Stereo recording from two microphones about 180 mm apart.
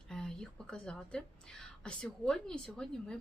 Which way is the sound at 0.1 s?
5° left (ahead or behind).